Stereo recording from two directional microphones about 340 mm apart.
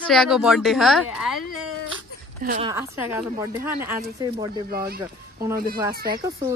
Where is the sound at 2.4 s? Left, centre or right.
Right.